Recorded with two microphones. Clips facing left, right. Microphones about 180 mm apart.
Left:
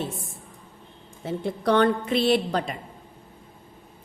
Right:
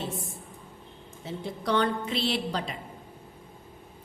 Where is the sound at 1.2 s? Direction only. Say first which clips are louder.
Left 7 dB; 55° left (ahead or behind).